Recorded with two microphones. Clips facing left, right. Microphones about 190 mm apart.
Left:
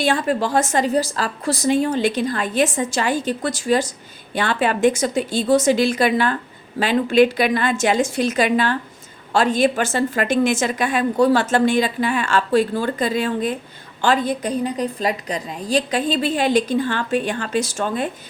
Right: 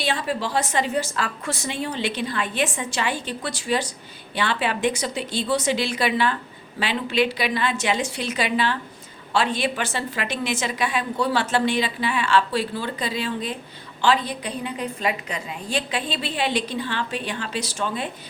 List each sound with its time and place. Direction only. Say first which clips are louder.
0.0 s a woman's voice: left 6 dB; 50° left (ahead or behind)